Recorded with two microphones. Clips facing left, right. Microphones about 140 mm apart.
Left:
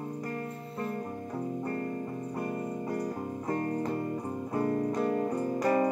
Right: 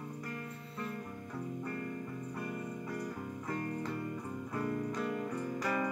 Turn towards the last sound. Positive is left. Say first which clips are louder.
# left 8 dB
turn(degrees=40)  # may be behind; listen again after turning